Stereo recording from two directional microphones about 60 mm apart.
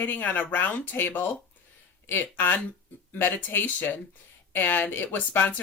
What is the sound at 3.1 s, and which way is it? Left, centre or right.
Speech, left.